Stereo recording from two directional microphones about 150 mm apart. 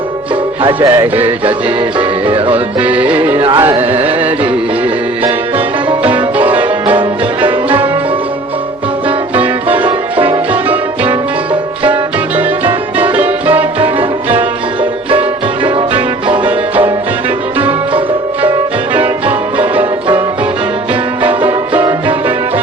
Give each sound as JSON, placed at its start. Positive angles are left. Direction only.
{"t": 0.6, "sound": "music", "side_deg": -35}
{"t": 0.9, "sound": "music", "side_deg": -15}
{"t": 2.2, "sound": "music", "side_deg": -40}
{"t": 2.8, "sound": "music", "side_deg": -10}
{"t": 3.3, "sound": "music", "side_deg": -40}
{"t": 3.6, "sound": "music", "side_deg": -15}
{"t": 6.0, "sound": "music", "side_deg": -10}
{"t": 9.3, "sound": "music", "side_deg": -10}
{"t": 12.4, "sound": "music", "side_deg": -10}
{"t": 13.7, "sound": "music", "side_deg": -40}
{"t": 16.2, "sound": "music", "side_deg": -35}
{"t": 21.7, "sound": "music", "side_deg": -15}